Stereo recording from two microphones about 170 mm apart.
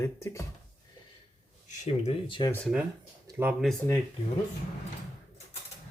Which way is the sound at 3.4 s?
10° right (ahead or behind).